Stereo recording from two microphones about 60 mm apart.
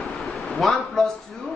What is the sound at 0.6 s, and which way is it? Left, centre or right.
Speech, centre.